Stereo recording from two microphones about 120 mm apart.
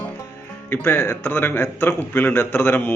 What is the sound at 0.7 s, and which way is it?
A man's voice, 20° left (ahead or behind).